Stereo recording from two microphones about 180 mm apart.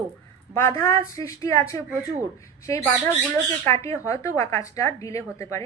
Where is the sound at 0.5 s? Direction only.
15° left (ahead or behind).